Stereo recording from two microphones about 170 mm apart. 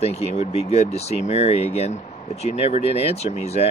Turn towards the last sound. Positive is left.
turn(degrees=40)  # may be behind; listen again after turning